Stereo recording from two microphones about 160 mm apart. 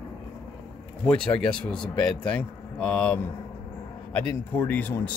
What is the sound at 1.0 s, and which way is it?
Speech, 5° left (ahead or behind).